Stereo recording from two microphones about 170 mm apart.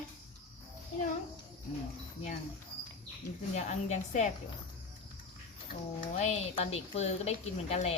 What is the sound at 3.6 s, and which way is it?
Speech, 45° left (ahead or behind).